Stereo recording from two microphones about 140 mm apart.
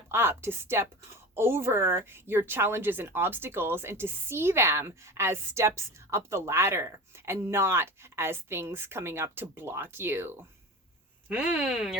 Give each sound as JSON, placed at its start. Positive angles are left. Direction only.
{"t": 0.1, "sound": "a woman's voice", "side_deg": -15}